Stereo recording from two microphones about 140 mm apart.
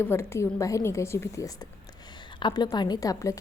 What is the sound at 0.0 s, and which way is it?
A woman's voice, 15° left (ahead or behind).